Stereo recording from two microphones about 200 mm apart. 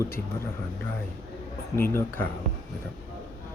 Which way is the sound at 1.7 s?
10° left (ahead or behind).